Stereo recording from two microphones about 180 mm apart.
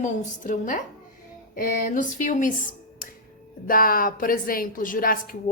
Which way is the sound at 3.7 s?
50° left (ahead or behind).